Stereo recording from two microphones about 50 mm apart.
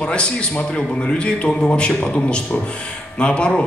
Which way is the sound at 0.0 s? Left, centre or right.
Left.